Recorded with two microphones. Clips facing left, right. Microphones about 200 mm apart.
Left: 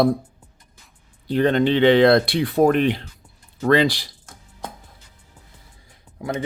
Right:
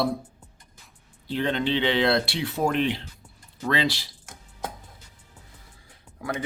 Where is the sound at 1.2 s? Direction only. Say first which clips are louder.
Left 8 dB; 50° left (ahead or behind).